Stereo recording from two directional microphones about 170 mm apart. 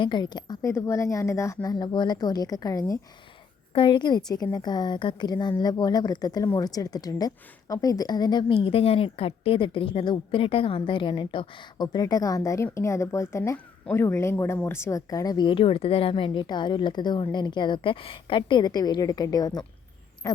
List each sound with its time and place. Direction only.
0.0 s speech: 25° left (ahead or behind)
20.2 s owl: 15° left (ahead or behind)